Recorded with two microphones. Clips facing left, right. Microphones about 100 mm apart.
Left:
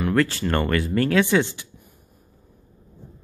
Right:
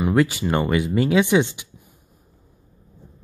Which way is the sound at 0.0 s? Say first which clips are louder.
Right 2 dB; 15° right (ahead or behind).